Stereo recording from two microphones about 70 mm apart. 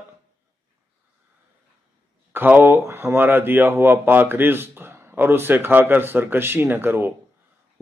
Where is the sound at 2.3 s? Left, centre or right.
Right.